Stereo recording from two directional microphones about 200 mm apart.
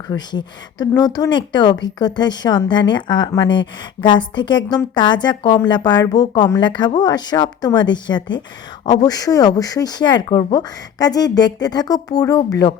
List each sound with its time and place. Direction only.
0.1 s speech: 20° left (ahead or behind)